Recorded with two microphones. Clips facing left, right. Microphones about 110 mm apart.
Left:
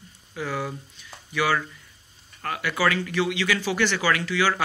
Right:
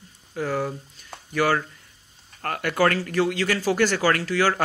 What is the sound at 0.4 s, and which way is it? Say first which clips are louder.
Speech: right 4 dB; 45° right (ahead or behind).